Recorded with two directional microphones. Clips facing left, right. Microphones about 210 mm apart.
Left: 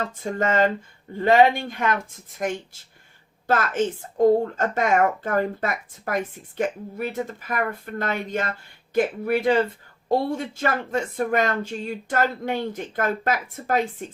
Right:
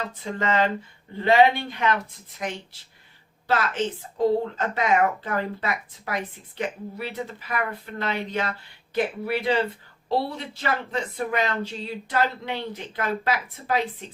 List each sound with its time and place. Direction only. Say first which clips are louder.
0.2 s a woman's voice: left 3 dB; 50° left (ahead or behind)
3.4 s a woman's voice: left 3 dB; 50° left (ahead or behind)